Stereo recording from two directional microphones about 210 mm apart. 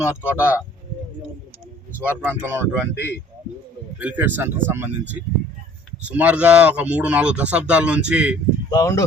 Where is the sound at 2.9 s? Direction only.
50° left (ahead or behind).